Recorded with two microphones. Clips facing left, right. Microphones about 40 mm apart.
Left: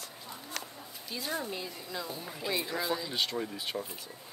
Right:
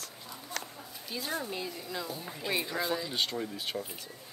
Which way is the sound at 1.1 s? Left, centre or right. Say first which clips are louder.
Even; centre.